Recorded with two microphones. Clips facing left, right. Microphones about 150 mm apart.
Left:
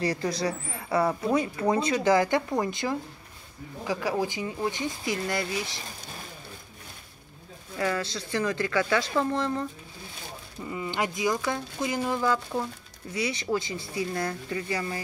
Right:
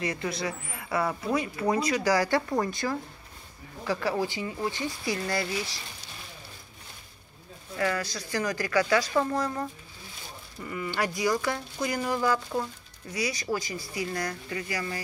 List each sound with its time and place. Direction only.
0.0 s a woman's voice: 35° left (ahead or behind)
7.8 s a woman's voice: 25° left (ahead or behind)
10.6 s a woman's voice: 20° left (ahead or behind)